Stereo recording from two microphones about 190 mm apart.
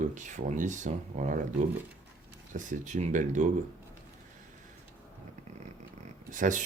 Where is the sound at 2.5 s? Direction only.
40° right (ahead or behind).